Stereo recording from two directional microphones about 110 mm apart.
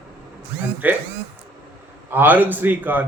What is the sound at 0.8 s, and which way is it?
Speech, 15° right (ahead or behind).